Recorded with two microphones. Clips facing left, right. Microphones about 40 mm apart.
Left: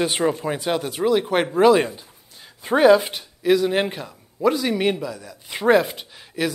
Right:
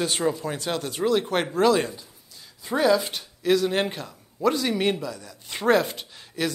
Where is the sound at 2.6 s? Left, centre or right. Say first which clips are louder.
Left 7 dB; left.